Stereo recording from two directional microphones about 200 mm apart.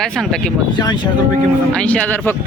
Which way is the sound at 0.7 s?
20° left (ahead or behind).